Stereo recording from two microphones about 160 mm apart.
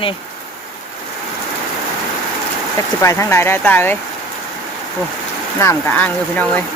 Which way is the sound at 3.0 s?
15° left (ahead or behind).